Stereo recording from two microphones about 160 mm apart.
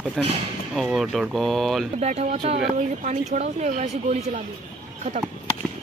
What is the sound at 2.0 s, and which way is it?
Speech, 40° right (ahead or behind).